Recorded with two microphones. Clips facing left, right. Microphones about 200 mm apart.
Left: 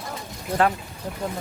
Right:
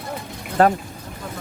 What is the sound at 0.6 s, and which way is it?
Speech, 40° right (ahead or behind).